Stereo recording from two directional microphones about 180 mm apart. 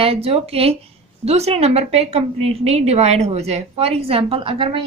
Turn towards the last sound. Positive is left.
turn(degrees=-30)  # may be behind; listen again after turning